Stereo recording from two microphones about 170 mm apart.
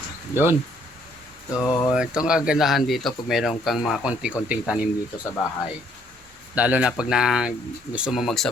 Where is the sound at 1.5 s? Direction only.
20° left (ahead or behind).